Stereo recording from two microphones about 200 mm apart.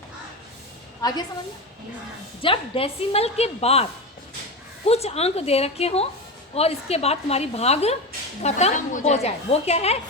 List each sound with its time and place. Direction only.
1.0 s a woman's voice: 20° left (ahead or behind)
2.4 s a woman's voice: 25° left (ahead or behind)
4.9 s a woman's voice: 30° left (ahead or behind)